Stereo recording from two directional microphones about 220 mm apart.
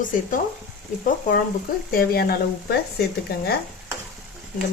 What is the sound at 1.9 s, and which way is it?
Speech, 45° left (ahead or behind).